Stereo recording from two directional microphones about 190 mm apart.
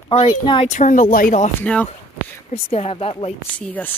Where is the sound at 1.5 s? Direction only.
5° left (ahead or behind).